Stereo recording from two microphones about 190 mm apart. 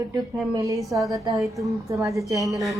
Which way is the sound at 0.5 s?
15° right (ahead or behind).